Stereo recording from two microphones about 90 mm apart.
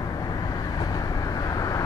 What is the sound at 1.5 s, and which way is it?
Vehicle, 40° left (ahead or behind).